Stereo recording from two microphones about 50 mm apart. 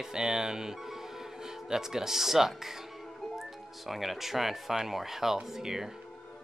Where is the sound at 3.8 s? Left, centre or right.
Centre.